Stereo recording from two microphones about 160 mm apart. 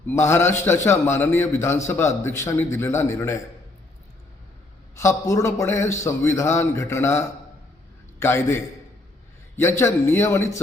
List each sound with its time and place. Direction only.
0.1 s a man's voice: 15° left (ahead or behind)
4.9 s a man's voice: 20° left (ahead or behind)